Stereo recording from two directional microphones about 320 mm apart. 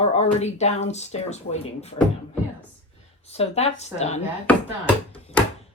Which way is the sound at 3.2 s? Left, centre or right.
Centre.